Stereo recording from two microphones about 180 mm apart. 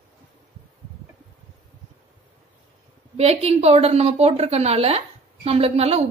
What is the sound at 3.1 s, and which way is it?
A woman's voice, 35° right (ahead or behind).